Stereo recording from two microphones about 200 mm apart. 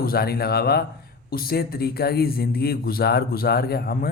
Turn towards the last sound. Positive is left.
turn(degrees=50)  # may be behind; listen again after turning